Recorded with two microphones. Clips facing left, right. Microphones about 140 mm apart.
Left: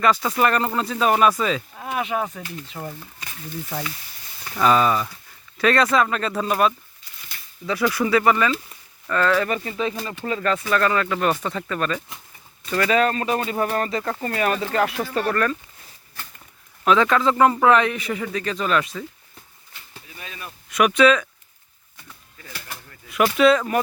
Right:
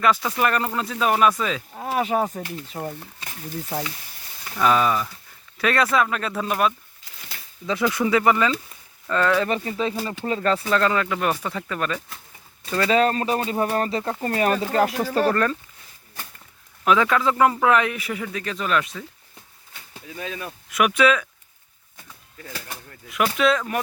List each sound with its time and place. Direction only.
0.0 s a man's voice: centre (ahead or behind)
1.7 s speech: 35° right (ahead or behind)
2.4 s speech: 50° right (ahead or behind)
2.7 s speech: 30° right (ahead or behind)
4.6 s a man's voice: centre (ahead or behind)
7.7 s speech: 20° right (ahead or behind)
9.5 s speech: 30° right (ahead or behind); by 11.9 s 10° right (ahead or behind)
12.7 s speech: 25° right (ahead or behind)
15.3 s speech: 25° right (ahead or behind)
16.8 s a man's voice: 10° right (ahead or behind)
20.7 s a man's voice: 5° right (ahead or behind)
23.0 s a man's voice: centre (ahead or behind)